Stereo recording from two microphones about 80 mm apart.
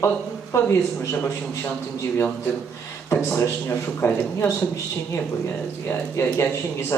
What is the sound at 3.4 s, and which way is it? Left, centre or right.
A man's voice, left.